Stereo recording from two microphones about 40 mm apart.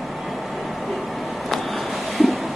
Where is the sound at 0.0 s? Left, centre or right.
Centre.